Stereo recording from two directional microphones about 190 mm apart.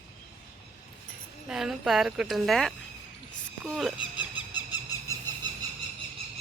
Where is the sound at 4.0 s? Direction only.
25° left (ahead or behind).